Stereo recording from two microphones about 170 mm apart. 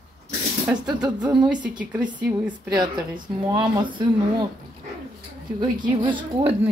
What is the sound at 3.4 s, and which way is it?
A woman's voice, 20° right (ahead or behind).